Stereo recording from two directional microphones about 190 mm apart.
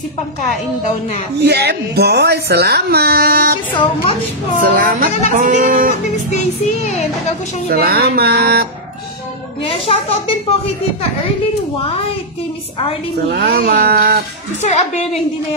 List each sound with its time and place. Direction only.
1.4 s speech: 60° right (ahead or behind)
3.7 s a woman's voice: 30° left (ahead or behind)
4.6 s speech: 45° right (ahead or behind)
6.3 s speech: 35° left (ahead or behind)
7.7 s speech: 55° right (ahead or behind)
9.6 s speech: 30° left (ahead or behind)
13.3 s speech: 85° right
13.8 s speech: 55° right (ahead or behind)
14.6 s speech: 35° left (ahead or behind)